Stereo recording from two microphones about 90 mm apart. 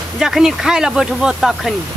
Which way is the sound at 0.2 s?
5° right (ahead or behind).